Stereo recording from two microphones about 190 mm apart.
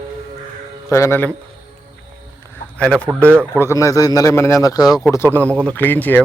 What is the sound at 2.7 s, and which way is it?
A man's voice, 5° left (ahead or behind).